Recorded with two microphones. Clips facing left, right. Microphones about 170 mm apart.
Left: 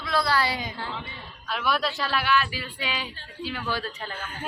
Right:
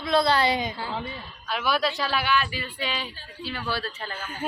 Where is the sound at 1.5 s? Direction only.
Centre (ahead or behind).